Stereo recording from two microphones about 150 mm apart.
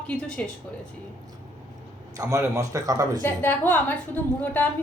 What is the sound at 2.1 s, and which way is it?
A man's voice, 20° right (ahead or behind).